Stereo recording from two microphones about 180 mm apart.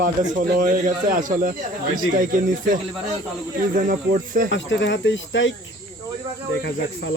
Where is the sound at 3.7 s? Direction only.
50° right (ahead or behind).